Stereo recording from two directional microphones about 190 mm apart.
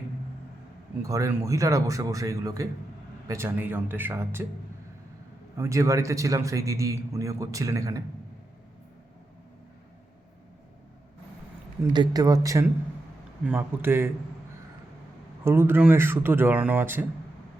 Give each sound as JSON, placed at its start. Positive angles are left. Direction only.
{"t": 1.0, "sound": "a man's voice", "side_deg": -15}
{"t": 5.5, "sound": "a man's voice", "side_deg": -15}
{"t": 11.8, "sound": "a man's voice", "side_deg": -20}
{"t": 15.4, "sound": "a man's voice", "side_deg": -10}